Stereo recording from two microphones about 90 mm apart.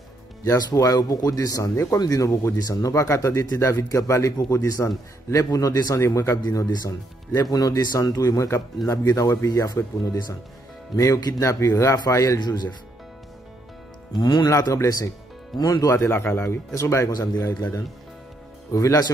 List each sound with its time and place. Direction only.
0.5 s speech: 45° left (ahead or behind)
5.9 s speech: 30° left (ahead or behind)
6.4 s speech: 45° left (ahead or behind)
12.4 s speech: 50° left (ahead or behind)
14.2 s speech: 50° left (ahead or behind)
14.6 s speech: 40° left (ahead or behind)
15.9 s speech: 30° left (ahead or behind)
17.1 s speech: 45° left (ahead or behind)
18.7 s speech: 35° left (ahead or behind)